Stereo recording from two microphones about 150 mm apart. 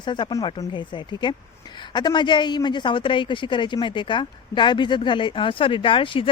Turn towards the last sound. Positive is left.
turn(degrees=35)  # may be behind; listen again after turning